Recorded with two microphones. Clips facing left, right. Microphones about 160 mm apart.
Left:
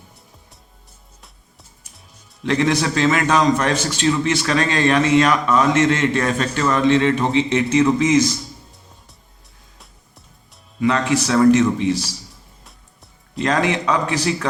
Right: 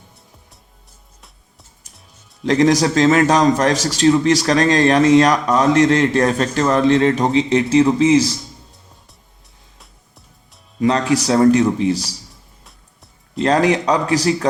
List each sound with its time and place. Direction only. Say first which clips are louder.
2.4 s a man's voice: right 4 dB; 40° right (ahead or behind)
9.7 s music: left 1 dB; centre (ahead or behind)
10.8 s a man's voice: right 2 dB; 35° right (ahead or behind)
12.6 s music: even; centre (ahead or behind)
13.4 s a man's voice: right 4 dB; 35° right (ahead or behind)